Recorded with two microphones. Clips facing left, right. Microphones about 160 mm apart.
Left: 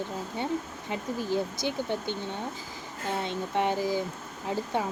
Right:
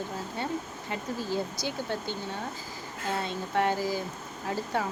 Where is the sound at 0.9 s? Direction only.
20° left (ahead or behind).